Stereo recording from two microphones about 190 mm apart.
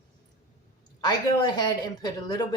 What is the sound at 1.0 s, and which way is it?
Speech, 20° left (ahead or behind).